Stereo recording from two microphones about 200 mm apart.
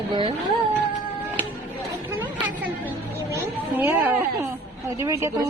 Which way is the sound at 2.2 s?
10° right (ahead or behind).